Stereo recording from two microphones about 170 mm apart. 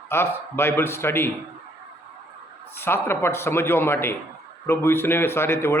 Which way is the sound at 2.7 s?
15° left (ahead or behind).